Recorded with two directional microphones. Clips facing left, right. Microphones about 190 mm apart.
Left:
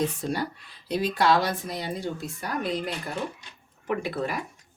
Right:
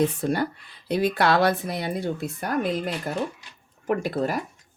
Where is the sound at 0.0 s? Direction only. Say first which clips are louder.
Right 5 dB; 55° right (ahead or behind).